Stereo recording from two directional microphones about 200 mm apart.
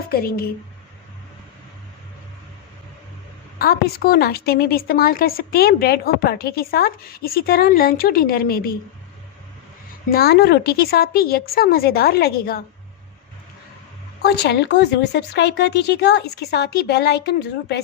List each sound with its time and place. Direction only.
0.1 s a woman's voice: 50° left (ahead or behind)
3.6 s a woman's voice: 50° left (ahead or behind)
10.1 s a woman's voice: 50° left (ahead or behind)
14.2 s speech: 55° left (ahead or behind)